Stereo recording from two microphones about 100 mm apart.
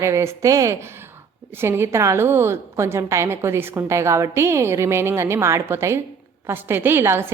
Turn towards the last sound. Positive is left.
turn(degrees=-25)  # may be behind; listen again after turning